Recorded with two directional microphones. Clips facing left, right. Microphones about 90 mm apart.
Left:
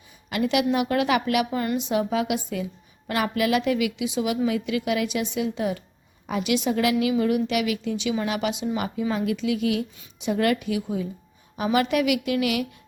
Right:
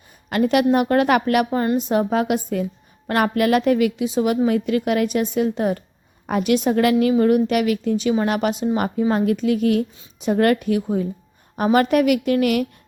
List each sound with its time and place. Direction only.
0.3 s a woman's voice: 45° right (ahead or behind)